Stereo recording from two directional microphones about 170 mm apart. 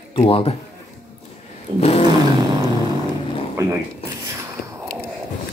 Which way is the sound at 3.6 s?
15° right (ahead or behind).